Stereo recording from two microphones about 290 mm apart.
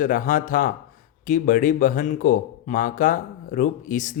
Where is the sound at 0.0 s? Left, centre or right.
Left.